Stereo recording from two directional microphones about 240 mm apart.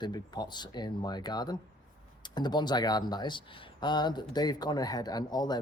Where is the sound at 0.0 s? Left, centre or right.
Centre.